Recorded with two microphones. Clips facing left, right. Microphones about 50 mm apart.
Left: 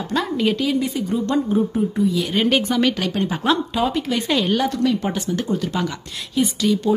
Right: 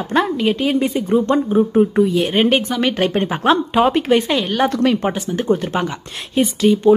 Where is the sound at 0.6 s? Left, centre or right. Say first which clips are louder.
Right 3 dB; right.